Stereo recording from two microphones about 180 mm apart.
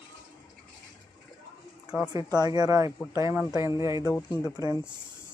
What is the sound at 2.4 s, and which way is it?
Speech, 20° right (ahead or behind).